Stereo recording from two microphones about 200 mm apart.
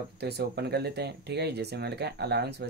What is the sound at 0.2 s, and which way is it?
Speech, 55° right (ahead or behind).